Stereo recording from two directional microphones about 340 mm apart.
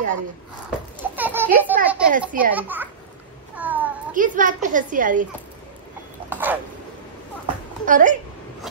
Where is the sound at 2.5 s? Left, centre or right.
Centre.